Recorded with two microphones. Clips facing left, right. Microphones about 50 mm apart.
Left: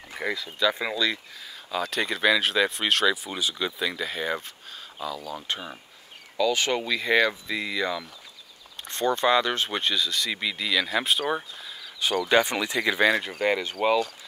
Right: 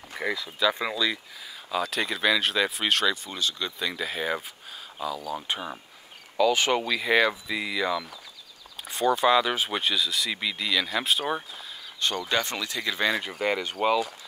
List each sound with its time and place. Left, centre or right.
0.1 s speech: centre
3.3 s speech: centre
3.9 s speech: centre
12.3 s speech: centre
13.0 s speech: centre